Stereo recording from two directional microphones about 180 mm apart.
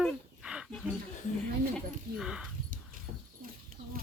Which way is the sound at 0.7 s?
Centre (ahead or behind).